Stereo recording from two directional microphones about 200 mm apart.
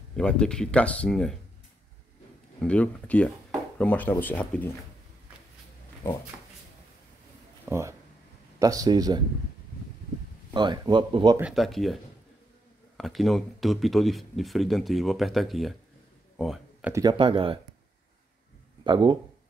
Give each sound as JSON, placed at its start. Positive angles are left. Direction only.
{"t": 0.1, "sound": "speech", "side_deg": 5}
{"t": 2.6, "sound": "speech", "side_deg": 5}
{"t": 7.6, "sound": "speech", "side_deg": -15}
{"t": 10.5, "sound": "speech", "side_deg": -20}
{"t": 11.3, "sound": "speech", "side_deg": -5}
{"t": 16.3, "sound": "a sound", "side_deg": 0}
{"t": 16.9, "sound": "speech", "side_deg": -20}
{"t": 18.9, "sound": "speech", "side_deg": -25}